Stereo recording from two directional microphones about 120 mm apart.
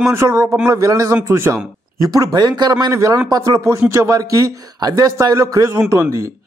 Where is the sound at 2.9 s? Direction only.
25° right (ahead or behind).